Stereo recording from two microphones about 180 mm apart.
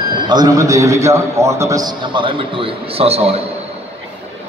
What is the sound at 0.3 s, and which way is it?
A man's voice, 20° right (ahead or behind).